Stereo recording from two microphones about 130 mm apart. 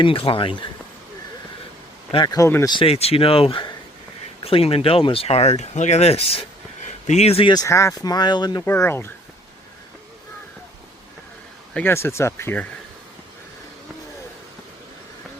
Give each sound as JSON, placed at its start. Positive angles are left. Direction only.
{"t": 0.0, "sound": "speech", "side_deg": 45}
{"t": 2.1, "sound": "speech", "side_deg": 30}
{"t": 2.6, "sound": "speech", "side_deg": 40}
{"t": 7.5, "sound": "speech", "side_deg": 25}
{"t": 8.6, "sound": "speech", "side_deg": 20}
{"t": 11.7, "sound": "speech", "side_deg": 15}